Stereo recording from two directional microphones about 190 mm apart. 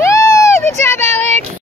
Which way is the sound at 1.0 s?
35° right (ahead or behind).